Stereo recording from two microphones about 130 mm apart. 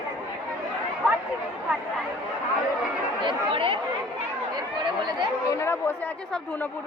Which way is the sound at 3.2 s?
40° right (ahead or behind).